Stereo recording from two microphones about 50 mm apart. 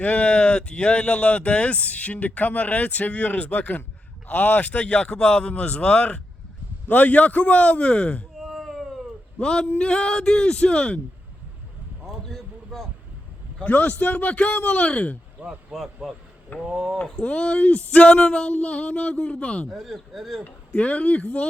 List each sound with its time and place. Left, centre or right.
0.0 s speech: left
8.4 s a sound: centre
9.4 s speech: centre
12.0 s boat: centre
13.7 s speech: left
15.4 s speech: right
16.7 s speech: centre
17.2 s speech: centre
19.7 s speech: centre
20.7 s speech: left